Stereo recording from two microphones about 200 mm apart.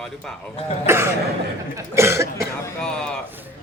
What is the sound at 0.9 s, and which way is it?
Cough, 10° right (ahead or behind).